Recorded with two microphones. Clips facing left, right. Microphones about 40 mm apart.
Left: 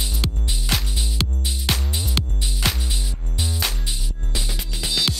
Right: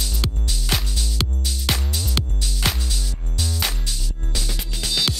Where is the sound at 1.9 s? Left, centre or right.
Left.